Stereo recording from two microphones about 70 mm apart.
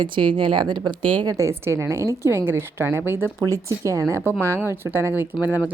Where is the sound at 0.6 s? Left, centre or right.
Right.